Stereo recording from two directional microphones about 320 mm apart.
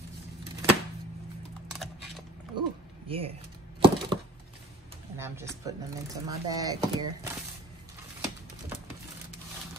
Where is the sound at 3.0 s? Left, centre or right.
Centre.